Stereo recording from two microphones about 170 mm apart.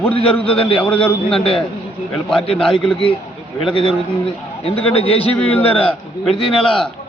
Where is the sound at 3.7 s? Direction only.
35° left (ahead or behind).